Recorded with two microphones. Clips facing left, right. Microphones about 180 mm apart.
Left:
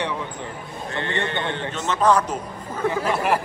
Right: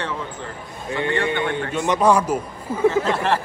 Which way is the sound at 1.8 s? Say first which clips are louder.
Right 2 dB; 10° right (ahead or behind).